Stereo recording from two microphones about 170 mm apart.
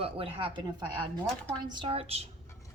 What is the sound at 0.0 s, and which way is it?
Speech, 35° right (ahead or behind).